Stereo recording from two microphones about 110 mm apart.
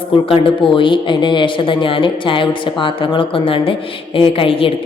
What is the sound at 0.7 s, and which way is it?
Speech, 50° left (ahead or behind).